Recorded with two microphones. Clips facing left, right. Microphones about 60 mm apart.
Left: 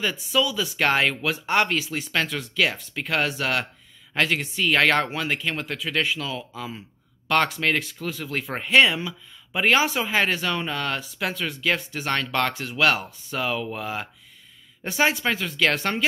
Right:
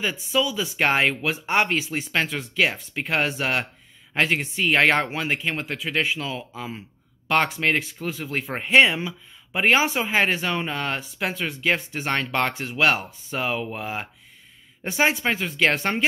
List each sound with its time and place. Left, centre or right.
0.0 s speech: centre